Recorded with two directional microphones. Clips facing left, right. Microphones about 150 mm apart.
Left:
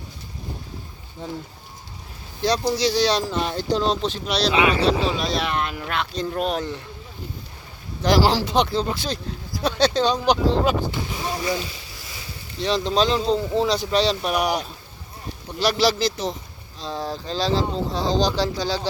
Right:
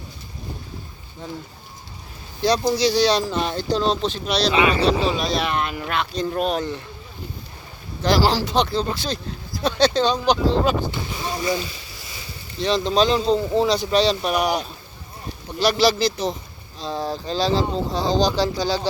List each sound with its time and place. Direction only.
2.7 s speech: centre (ahead or behind)
3.6 s speech: 15° left (ahead or behind); by 6.7 s centre (ahead or behind)
8.0 s speech: 20° left (ahead or behind)
11.2 s boat: 5° left (ahead or behind)
12.6 s speech: 5° left (ahead or behind)